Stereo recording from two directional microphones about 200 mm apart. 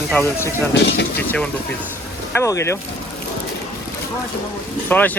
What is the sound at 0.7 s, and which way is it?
Speech, 60° left (ahead or behind).